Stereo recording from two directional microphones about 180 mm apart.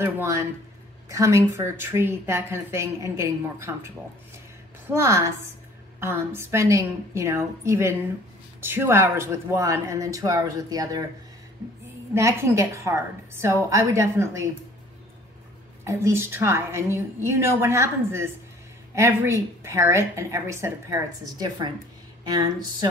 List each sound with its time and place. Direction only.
0.0 s a woman's voice: 15° right (ahead or behind)
4.9 s a woman's voice: 15° right (ahead or behind)
12.1 s a woman's voice: 15° right (ahead or behind)
15.8 s a woman's voice: 15° right (ahead or behind)
22.2 s a sound: 20° right (ahead or behind)